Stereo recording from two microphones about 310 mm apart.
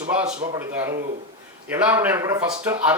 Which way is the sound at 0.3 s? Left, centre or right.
Right.